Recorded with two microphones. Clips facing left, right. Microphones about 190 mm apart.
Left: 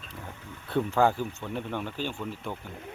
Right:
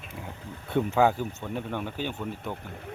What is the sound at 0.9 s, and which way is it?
Speech, 10° right (ahead or behind).